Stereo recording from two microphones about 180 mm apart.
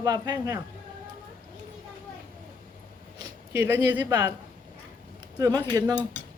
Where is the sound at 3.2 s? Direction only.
15° right (ahead or behind).